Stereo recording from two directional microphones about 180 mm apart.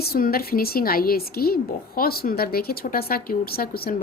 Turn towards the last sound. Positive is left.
turn(degrees=55)  # may be behind; listen again after turning